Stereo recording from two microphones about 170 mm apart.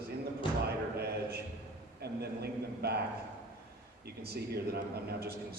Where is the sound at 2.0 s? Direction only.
70° right (ahead or behind).